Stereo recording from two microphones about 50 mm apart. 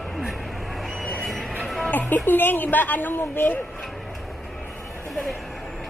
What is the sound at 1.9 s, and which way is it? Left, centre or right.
Speech, left.